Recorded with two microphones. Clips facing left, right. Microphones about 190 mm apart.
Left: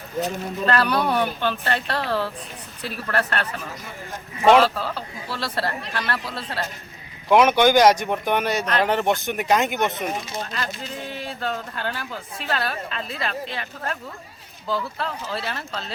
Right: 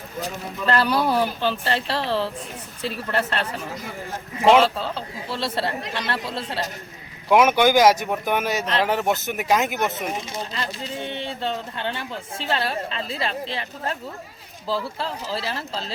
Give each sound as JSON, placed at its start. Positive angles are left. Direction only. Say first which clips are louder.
{"t": 0.7, "sound": "speech", "louder": "right 1 dB", "side_deg": -30}
{"t": 4.4, "sound": "speech", "louder": "even", "side_deg": 0}
{"t": 4.7, "sound": "speech", "louder": "even", "side_deg": -25}
{"t": 7.3, "sound": "speech", "louder": "left 1 dB", "side_deg": -5}
{"t": 10.5, "sound": "speech", "louder": "right 1 dB", "side_deg": -25}